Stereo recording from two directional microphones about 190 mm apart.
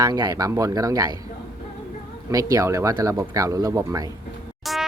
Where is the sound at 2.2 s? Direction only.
15° right (ahead or behind).